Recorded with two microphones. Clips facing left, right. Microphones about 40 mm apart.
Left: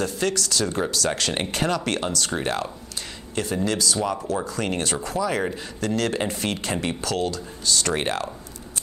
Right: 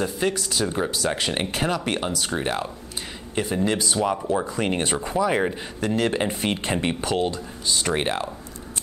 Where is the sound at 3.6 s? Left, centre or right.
Right.